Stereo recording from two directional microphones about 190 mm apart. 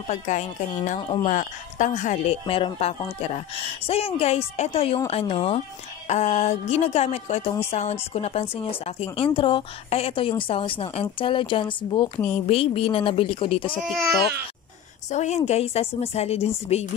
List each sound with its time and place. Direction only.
0.1 s a woman's voice: 40° left (ahead or behind)
2.4 s a woman's voice: 30° left (ahead or behind)
15.0 s a woman's voice: 35° left (ahead or behind)